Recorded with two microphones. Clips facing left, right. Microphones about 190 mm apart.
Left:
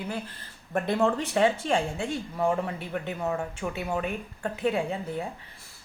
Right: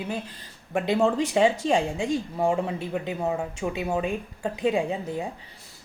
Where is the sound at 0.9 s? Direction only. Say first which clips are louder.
Right 3 dB; 15° right (ahead or behind).